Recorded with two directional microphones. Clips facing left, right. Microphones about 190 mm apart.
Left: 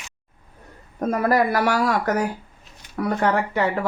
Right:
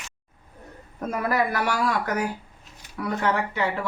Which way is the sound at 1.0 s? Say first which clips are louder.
Left 5 dB; 40° left (ahead or behind).